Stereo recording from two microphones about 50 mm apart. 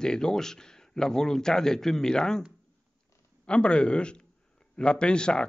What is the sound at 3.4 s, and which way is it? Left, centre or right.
A man's voice, left.